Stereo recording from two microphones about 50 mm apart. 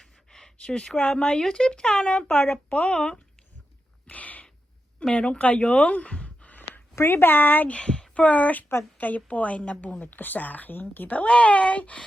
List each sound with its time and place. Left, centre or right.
0.0 s a sound: centre
1.1 s speech: centre
4.0 s a sound: left
4.9 s speech: left
7.1 s speech: left
7.7 s speech: centre